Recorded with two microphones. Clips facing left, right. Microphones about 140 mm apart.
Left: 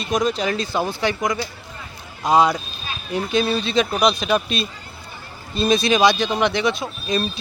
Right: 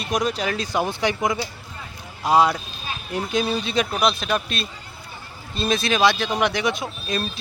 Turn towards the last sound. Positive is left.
turn(degrees=-5)  # may be behind; listen again after turning